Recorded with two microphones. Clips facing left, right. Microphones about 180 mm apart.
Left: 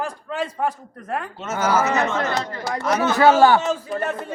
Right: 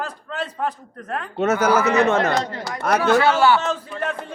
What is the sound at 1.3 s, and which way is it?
Speech, 65° right (ahead or behind).